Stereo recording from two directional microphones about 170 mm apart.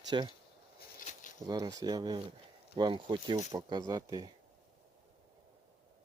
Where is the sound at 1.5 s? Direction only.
25° right (ahead or behind).